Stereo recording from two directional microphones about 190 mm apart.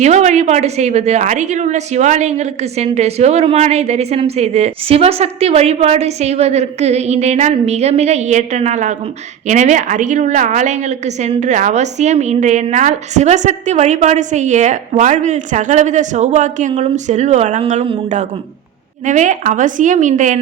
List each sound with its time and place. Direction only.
0.0 s a woman's voice: 35° right (ahead or behind)